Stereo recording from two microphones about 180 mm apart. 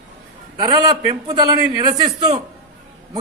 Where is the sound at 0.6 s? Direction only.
20° right (ahead or behind).